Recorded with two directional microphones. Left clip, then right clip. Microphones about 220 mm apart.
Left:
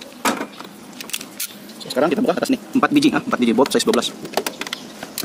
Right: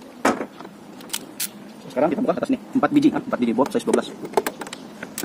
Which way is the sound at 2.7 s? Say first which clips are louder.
Left 2 dB; 60° left (ahead or behind).